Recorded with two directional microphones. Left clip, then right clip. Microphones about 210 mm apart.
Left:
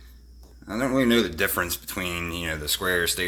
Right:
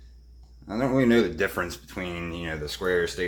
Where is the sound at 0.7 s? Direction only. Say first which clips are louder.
Even; 5° left (ahead or behind).